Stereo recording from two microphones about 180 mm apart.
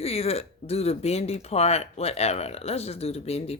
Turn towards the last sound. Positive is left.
turn(degrees=35)  # may be behind; listen again after turning